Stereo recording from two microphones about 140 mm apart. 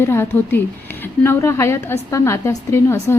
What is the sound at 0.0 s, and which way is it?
A woman's voice, 15° left (ahead or behind).